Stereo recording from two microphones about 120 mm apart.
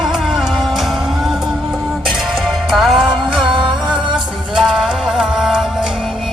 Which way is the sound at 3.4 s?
40° right (ahead or behind).